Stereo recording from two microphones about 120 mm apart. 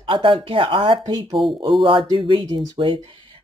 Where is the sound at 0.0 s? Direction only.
45° right (ahead or behind).